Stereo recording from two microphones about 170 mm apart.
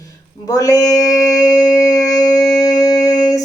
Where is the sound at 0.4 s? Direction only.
20° left (ahead or behind).